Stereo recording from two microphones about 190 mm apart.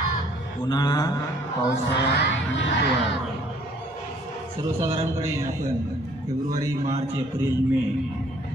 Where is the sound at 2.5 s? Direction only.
75° left (ahead or behind).